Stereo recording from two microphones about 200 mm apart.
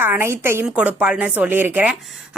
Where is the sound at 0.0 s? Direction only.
10° right (ahead or behind).